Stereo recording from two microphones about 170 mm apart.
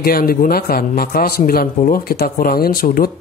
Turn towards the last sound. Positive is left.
turn(degrees=60)  # may be behind; listen again after turning